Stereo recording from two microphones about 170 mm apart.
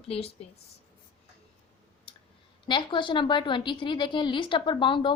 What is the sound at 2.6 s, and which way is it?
A woman's voice, 30° left (ahead or behind).